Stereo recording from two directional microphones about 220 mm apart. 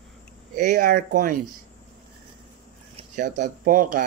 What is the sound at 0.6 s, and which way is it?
Speech, 35° right (ahead or behind).